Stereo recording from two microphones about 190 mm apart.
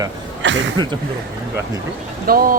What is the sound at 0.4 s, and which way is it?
Speech, 70° right (ahead or behind).